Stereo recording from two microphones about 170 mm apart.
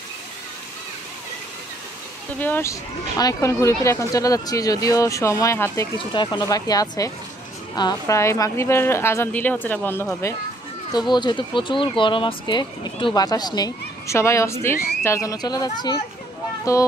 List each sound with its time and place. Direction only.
2.3 s speech: 10° left (ahead or behind)
10.9 s speech: 25° left (ahead or behind)